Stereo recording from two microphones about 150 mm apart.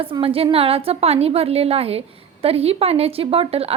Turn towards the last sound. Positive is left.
turn(degrees=-40)  # may be behind; listen again after turning